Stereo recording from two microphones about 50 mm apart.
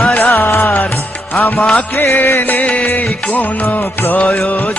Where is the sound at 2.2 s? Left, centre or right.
Left.